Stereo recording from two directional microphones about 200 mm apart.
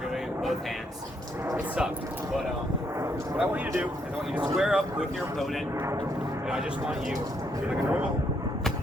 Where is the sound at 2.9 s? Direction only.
15° right (ahead or behind).